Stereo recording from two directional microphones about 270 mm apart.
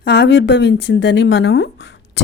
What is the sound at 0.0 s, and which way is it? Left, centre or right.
A woman's voice, left.